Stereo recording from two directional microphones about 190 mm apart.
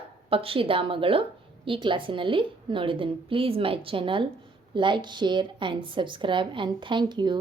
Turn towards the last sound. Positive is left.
turn(degrees=-25)  # may be behind; listen again after turning